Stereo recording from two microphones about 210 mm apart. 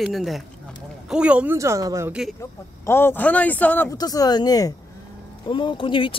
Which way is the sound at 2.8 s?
10° left (ahead or behind).